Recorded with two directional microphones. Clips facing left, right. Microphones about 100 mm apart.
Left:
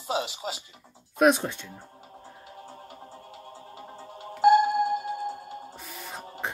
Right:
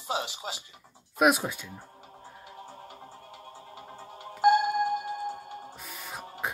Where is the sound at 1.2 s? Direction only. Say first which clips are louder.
Left 2 dB; 5° right (ahead or behind).